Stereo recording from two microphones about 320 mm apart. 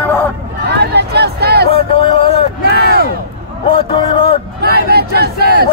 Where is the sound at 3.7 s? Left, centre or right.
Centre.